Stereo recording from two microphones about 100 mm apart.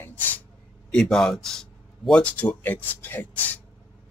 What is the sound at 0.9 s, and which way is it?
Speech, 5° left (ahead or behind).